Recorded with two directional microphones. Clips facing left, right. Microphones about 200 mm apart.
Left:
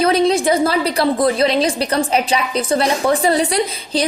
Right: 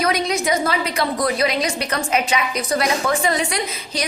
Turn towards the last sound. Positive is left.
turn(degrees=30)  # may be behind; listen again after turning